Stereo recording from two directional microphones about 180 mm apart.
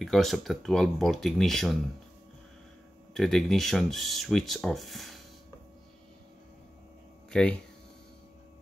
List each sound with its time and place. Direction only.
0.0 s speech: centre (ahead or behind)
3.2 s speech: centre (ahead or behind)
7.2 s speech: 5° left (ahead or behind)